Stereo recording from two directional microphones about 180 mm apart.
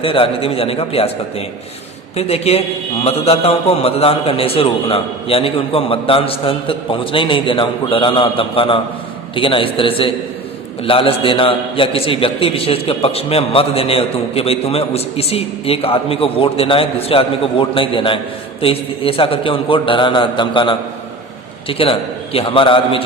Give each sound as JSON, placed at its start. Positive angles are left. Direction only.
{"t": 0.0, "sound": "a man's voice", "side_deg": 30}